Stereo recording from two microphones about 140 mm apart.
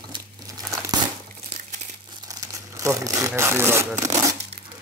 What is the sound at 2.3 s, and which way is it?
Speech, 25° right (ahead or behind).